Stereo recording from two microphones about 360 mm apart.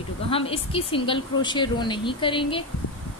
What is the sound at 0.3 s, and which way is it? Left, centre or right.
A woman's voice, centre.